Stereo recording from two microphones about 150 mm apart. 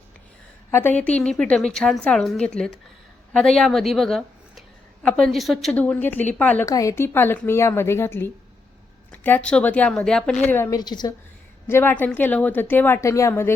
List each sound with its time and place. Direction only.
0.7 s a woman's voice: 15° left (ahead or behind)
6.7 s a woman's voice: 20° left (ahead or behind)
10.8 s a woman's voice: 30° left (ahead or behind)
11.7 s a woman's voice: 15° left (ahead or behind)